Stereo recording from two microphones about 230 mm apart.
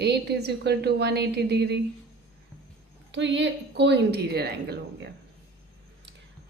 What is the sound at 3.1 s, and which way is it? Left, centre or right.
Speech, right.